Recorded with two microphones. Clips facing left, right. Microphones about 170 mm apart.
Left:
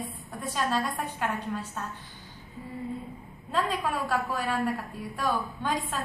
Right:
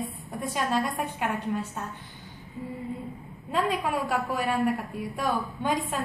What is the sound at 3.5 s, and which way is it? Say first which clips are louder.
A woman's voice: right 2 dB; 15° right (ahead or behind).